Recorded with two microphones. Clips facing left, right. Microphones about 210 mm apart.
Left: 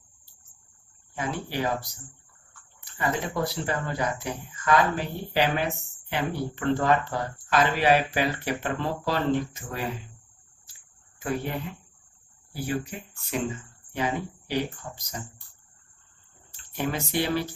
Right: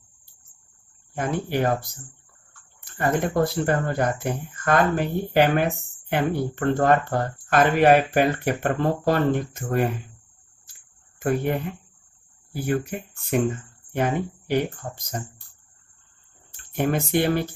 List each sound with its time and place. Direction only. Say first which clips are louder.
1.1 s speech: right 6 dB; 55° right (ahead or behind)
10.7 s a sound: right 2 dB; 55° right (ahead or behind)
12.6 s speech: right 5 dB; 55° right (ahead or behind)
16.5 s speech: right 6 dB; 55° right (ahead or behind)